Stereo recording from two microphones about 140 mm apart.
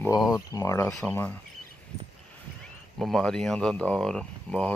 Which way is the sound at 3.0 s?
5° left (ahead or behind).